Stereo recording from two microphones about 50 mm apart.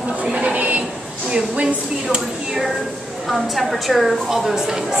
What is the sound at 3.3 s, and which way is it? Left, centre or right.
A woman's voice, centre.